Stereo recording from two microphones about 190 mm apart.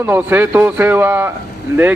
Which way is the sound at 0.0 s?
10° right (ahead or behind).